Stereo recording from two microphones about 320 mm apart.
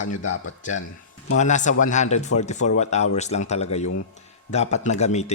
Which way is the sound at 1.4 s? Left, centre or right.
Left.